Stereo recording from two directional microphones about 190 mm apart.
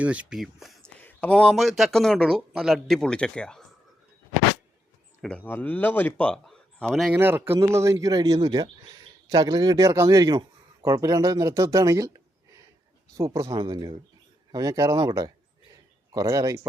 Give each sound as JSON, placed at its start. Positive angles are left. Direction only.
{"t": 0.0, "sound": "speech", "side_deg": -5}
{"t": 5.2, "sound": "speech", "side_deg": 5}
{"t": 7.1, "sound": "speech", "side_deg": -10}
{"t": 13.1, "sound": "speech", "side_deg": -15}